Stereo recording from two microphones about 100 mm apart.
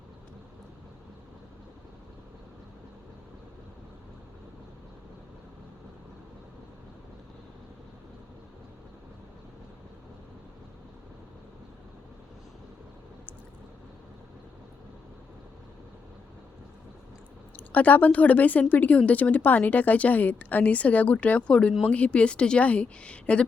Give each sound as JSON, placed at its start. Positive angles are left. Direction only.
{"t": 17.7, "sound": "speech", "side_deg": 15}